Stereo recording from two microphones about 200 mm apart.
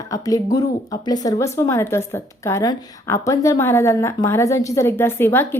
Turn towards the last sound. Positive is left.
turn(degrees=10)  # may be behind; listen again after turning